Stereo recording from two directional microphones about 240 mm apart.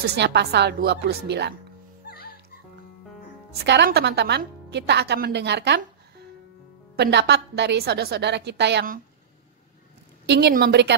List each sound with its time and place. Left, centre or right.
0.1 s a woman's voice: right
2.0 s music: left
3.5 s a woman's voice: right
10.2 s a woman's voice: right